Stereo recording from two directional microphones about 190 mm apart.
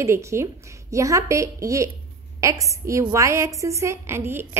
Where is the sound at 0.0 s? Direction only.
15° right (ahead or behind).